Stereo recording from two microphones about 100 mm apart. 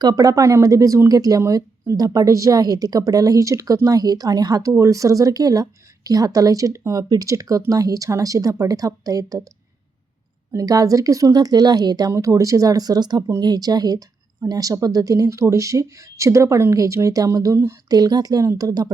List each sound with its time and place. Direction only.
0.0 s speech: 40° right (ahead or behind)
10.5 s speech: 35° right (ahead or behind)